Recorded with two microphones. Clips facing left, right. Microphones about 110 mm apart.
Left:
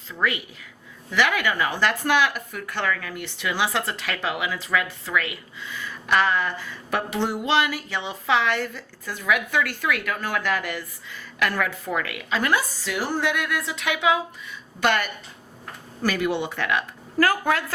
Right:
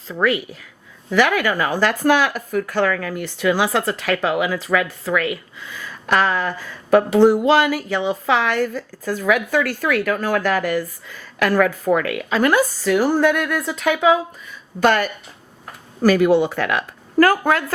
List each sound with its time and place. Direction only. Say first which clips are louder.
0.1 s speech: right 7 dB; 40° right (ahead or behind)